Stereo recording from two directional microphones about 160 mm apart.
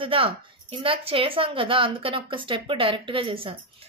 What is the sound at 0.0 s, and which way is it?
A woman's voice, 35° right (ahead or behind).